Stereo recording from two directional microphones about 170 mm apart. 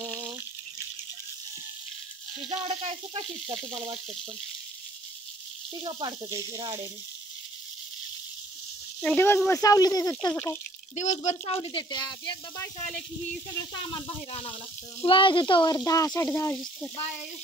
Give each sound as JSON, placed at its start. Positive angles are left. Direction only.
{"t": 0.0, "sound": "water", "side_deg": -25}
{"t": 2.4, "sound": "speech", "side_deg": -35}
{"t": 5.8, "sound": "speech", "side_deg": -25}
{"t": 9.0, "sound": "speech", "side_deg": 10}
{"t": 11.0, "sound": "speech", "side_deg": 45}
{"t": 15.0, "sound": "speech", "side_deg": 30}